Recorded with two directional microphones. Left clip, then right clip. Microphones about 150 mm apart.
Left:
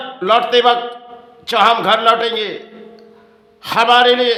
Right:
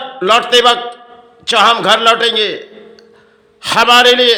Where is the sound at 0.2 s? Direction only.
15° right (ahead or behind).